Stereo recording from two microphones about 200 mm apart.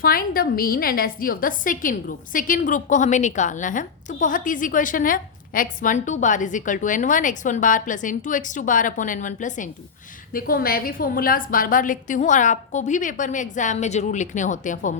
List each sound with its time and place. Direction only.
0.0 s a woman's voice: 45° left (ahead or behind)